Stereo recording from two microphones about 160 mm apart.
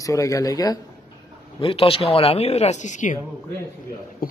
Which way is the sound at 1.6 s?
35° left (ahead or behind).